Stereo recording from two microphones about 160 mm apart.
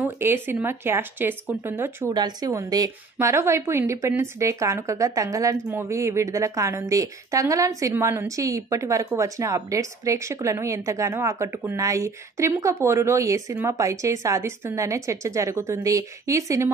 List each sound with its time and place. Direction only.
0.0 s speech: 15° right (ahead or behind)
2.1 s a woman's voice: 25° right (ahead or behind)